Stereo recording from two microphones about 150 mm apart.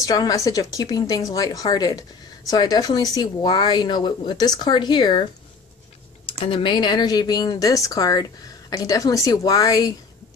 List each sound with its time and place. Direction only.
0.0 s speech: 25° left (ahead or behind)
6.4 s speech: 35° left (ahead or behind)